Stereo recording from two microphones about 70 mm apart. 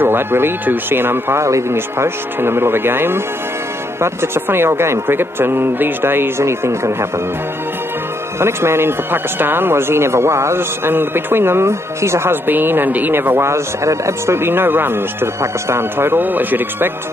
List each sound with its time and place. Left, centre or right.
0.0 s speech: right
8.4 s speech: right